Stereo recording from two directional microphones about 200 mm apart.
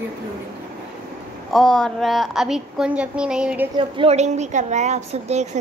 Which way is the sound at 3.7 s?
25° right (ahead or behind).